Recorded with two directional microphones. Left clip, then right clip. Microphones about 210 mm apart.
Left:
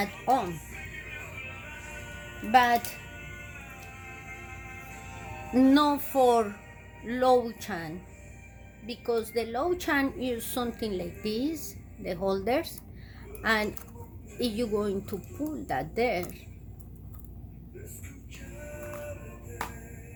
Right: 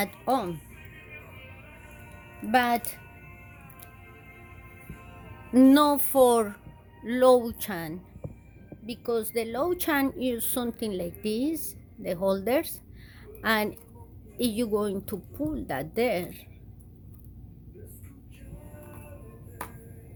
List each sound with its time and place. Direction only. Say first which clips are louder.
0.0 s speech: left 1 dB; 55° right (ahead or behind)
2.5 s music: left 2 dB; 55° right (ahead or behind)
5.5 s music: right 3 dB; 55° right (ahead or behind)
7.0 s a woman's voice: right 3 dB; 50° right (ahead or behind)